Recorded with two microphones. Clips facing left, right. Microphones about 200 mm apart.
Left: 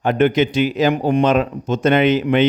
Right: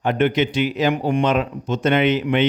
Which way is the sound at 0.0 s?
45° left (ahead or behind).